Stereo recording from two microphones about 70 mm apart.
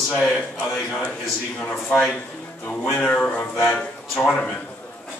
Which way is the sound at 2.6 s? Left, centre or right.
Centre.